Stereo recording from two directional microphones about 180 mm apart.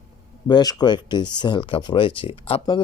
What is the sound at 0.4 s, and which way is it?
Speech, 20° left (ahead or behind).